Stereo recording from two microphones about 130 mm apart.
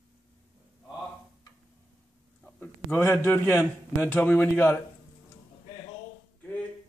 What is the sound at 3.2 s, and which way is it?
Speech, 15° left (ahead or behind).